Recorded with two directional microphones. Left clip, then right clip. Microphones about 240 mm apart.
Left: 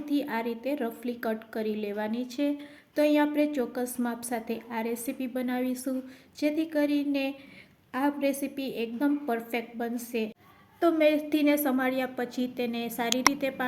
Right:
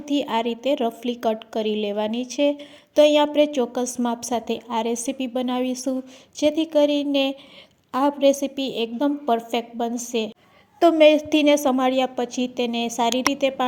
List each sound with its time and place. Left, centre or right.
0.1 s a woman's voice: right
13.3 s a woman's voice: centre